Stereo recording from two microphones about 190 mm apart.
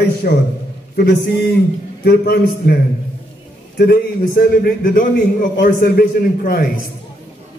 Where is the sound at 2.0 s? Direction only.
55° left (ahead or behind).